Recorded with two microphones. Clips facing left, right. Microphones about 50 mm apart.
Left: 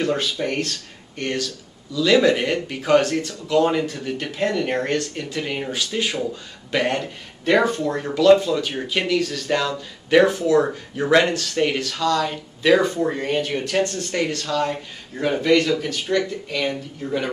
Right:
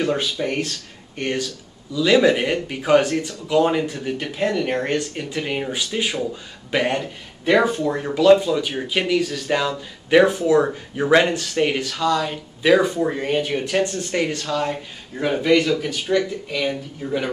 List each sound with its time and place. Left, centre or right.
0.0 s speech: centre
1.1 s speech: right
14.7 s speech: centre